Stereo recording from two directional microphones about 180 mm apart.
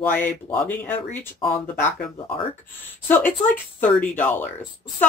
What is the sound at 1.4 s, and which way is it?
Speech, 30° left (ahead or behind).